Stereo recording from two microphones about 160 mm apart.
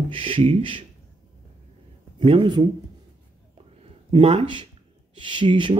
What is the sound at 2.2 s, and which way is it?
Speech, 30° right (ahead or behind).